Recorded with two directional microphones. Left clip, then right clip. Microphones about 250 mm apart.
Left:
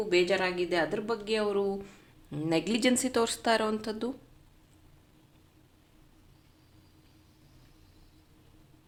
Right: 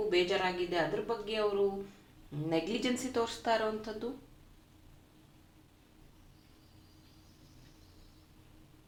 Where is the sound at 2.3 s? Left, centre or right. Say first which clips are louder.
Left 4 dB; left.